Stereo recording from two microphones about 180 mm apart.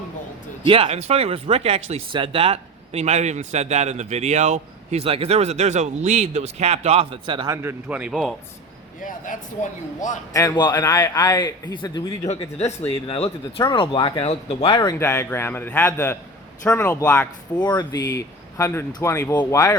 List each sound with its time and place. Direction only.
0.6 s speech: 30° right (ahead or behind); by 8.4 s centre (ahead or behind)
9.0 s speech: 45° left (ahead or behind)
10.3 s a man's voice: 20° left (ahead or behind)
12.3 s a man's voice: 35° left (ahead or behind)
14.9 s speech: 15° left (ahead or behind)